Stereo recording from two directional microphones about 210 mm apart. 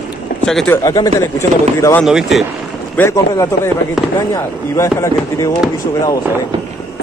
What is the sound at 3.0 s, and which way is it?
Speech, 10° left (ahead or behind).